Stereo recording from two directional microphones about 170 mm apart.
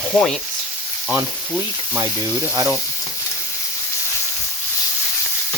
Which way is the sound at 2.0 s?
20° right (ahead or behind).